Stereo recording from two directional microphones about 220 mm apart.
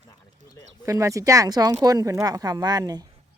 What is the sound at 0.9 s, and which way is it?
Speech, 15° right (ahead or behind).